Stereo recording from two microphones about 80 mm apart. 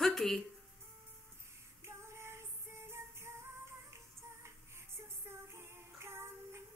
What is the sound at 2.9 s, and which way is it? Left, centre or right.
Music, right.